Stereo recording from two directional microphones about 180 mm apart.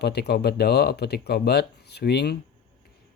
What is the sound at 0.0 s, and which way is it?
Speech, 65° left (ahead or behind).